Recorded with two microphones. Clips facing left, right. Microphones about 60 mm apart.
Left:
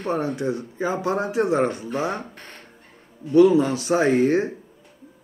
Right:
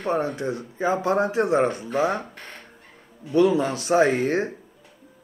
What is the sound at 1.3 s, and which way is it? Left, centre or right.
Speech, centre.